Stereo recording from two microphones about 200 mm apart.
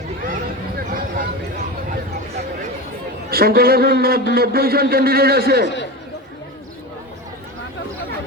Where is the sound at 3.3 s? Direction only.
50° right (ahead or behind).